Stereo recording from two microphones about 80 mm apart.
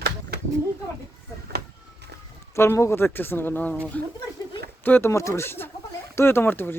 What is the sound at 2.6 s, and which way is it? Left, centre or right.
Speech, left.